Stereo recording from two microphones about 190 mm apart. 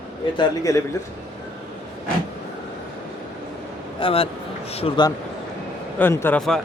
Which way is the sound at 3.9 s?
30° left (ahead or behind).